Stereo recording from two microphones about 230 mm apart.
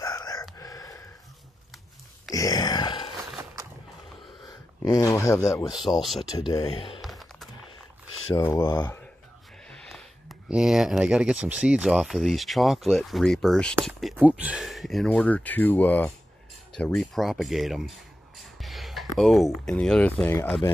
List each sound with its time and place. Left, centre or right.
0.0 s gasp: centre
2.3 s groan: centre
4.5 s speech: centre
5.8 s speech: centre
6.3 s speech: centre
7.0 s a sound: centre
8.5 s speech: centre
9.7 s speech: centre